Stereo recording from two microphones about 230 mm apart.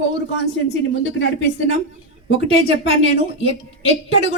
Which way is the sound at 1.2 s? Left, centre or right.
Left.